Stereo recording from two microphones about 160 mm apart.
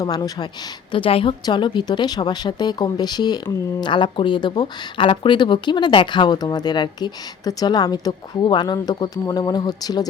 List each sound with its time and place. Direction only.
0.0 s speech: 25° left (ahead or behind)